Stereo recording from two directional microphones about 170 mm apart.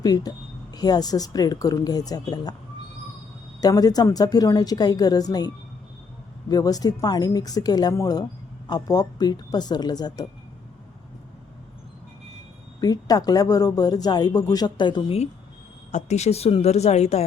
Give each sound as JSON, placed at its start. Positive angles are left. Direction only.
{"t": 0.0, "sound": "speech", "side_deg": 25}
{"t": 3.6, "sound": "speech", "side_deg": 20}
{"t": 6.5, "sound": "speech", "side_deg": 20}
{"t": 12.8, "sound": "speech", "side_deg": 25}
{"t": 15.9, "sound": "speech", "side_deg": 45}